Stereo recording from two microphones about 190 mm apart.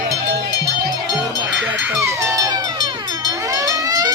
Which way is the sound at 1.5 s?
5° right (ahead or behind).